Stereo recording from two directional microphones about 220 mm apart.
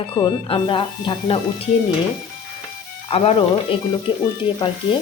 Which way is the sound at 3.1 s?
25° left (ahead or behind).